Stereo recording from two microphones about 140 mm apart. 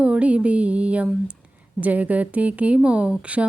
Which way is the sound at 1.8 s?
10° right (ahead or behind).